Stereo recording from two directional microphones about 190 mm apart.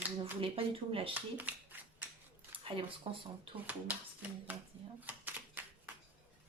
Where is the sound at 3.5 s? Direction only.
25° right (ahead or behind).